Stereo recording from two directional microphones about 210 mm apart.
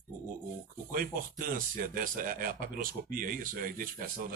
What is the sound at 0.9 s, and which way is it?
Speech, 45° right (ahead or behind).